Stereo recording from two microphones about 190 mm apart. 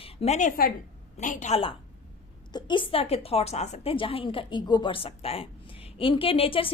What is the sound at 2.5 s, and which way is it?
A woman's voice, 25° left (ahead or behind).